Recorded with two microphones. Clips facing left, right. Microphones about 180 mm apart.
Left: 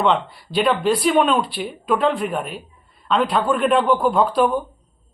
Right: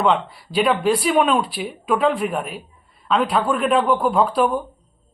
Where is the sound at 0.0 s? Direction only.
10° right (ahead or behind).